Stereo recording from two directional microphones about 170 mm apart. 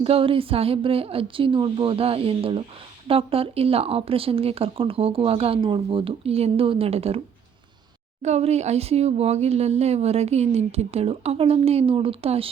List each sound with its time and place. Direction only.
0.0 s speech: 35° right (ahead or behind)
8.2 s speech: 40° right (ahead or behind)